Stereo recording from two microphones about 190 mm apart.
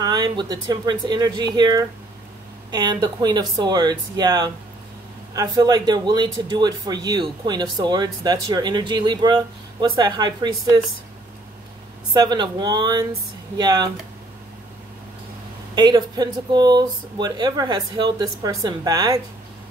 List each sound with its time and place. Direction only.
0.0 s speech: 20° right (ahead or behind)
12.1 s speech: 20° right (ahead or behind)
15.7 s speech: 20° right (ahead or behind)